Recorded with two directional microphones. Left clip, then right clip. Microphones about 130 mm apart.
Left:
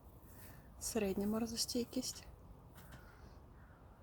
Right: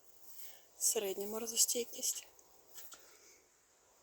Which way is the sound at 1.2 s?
20° right (ahead or behind).